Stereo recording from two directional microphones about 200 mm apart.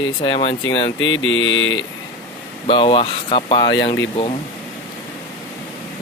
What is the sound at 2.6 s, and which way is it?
Speech, 25° left (ahead or behind).